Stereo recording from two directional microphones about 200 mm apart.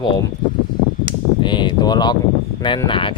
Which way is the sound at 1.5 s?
20° left (ahead or behind).